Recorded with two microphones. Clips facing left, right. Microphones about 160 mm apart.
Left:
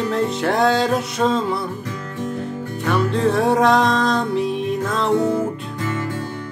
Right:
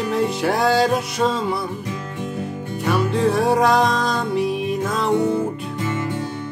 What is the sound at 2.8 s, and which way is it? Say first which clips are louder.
Music: even; 5° right (ahead or behind).